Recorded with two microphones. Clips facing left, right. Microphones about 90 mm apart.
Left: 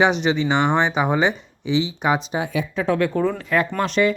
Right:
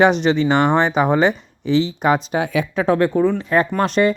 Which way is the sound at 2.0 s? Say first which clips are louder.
Right 4 dB; 55° right (ahead or behind).